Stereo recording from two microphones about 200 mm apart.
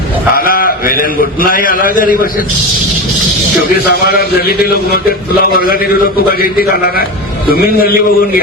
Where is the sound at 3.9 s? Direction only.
50° left (ahead or behind).